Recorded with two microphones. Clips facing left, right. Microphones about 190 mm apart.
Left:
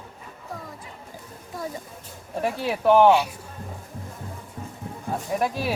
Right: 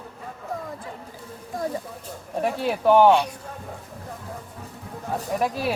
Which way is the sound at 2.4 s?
Centre (ahead or behind).